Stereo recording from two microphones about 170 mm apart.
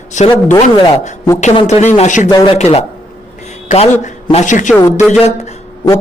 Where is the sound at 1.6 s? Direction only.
45° left (ahead or behind).